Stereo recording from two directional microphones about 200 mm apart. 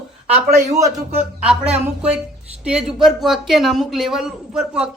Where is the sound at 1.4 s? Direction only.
5° right (ahead or behind).